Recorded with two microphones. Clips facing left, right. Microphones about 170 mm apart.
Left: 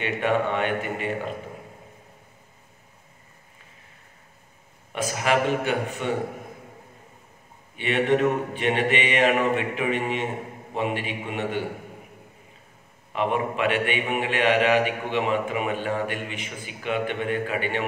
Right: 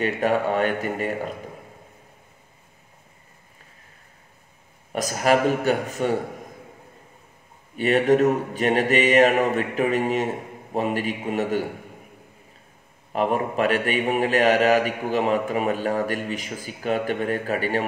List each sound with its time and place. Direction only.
0.0 s a man's voice: 40° right (ahead or behind)
4.9 s a man's voice: 40° right (ahead or behind)
7.7 s a man's voice: 40° right (ahead or behind)
13.1 s a man's voice: 40° right (ahead or behind)